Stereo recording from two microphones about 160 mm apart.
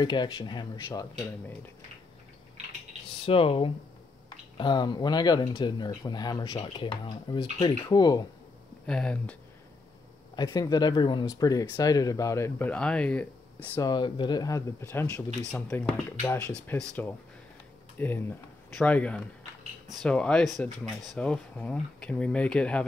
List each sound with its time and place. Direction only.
0.0 s speech: 30° left (ahead or behind)
3.3 s speech: 35° left (ahead or behind)
8.8 s speech: 5° left (ahead or behind)
10.3 s speech: 25° left (ahead or behind); by 13.8 s 10° left (ahead or behind)
13.8 s speech: 30° left (ahead or behind); by 22.8 s 5° left (ahead or behind)